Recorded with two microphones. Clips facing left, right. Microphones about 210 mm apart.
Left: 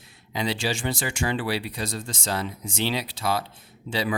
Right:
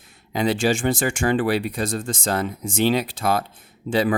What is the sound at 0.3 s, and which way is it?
Speech, 50° right (ahead or behind).